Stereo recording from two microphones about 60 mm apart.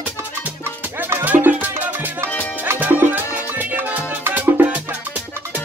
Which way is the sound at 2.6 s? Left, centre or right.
Right.